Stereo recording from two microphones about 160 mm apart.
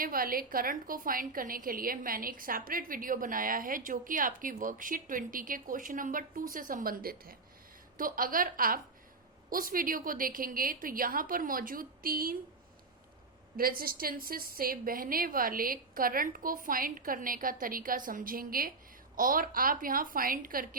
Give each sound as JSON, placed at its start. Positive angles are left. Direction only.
{"t": 0.0, "sound": "a woman's voice", "side_deg": -65}
{"t": 13.6, "sound": "a woman's voice", "side_deg": -65}